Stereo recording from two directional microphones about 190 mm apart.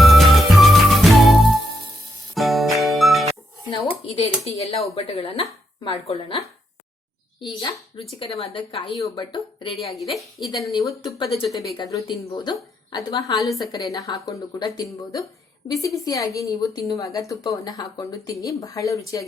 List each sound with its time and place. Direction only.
0.0 s music: centre (ahead or behind)
3.7 s a woman's voice: 25° left (ahead or behind)
9.9 s a woman's voice: centre (ahead or behind)
10.4 s a woman's voice: 20° left (ahead or behind)
11.2 s a woman's voice: 30° left (ahead or behind)
11.6 s a woman's voice: 20° left (ahead or behind)
13.3 s a woman's voice: centre (ahead or behind)
13.6 s a woman's voice: 20° left (ahead or behind)